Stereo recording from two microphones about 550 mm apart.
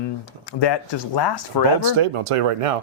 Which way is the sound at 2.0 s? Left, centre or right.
Right.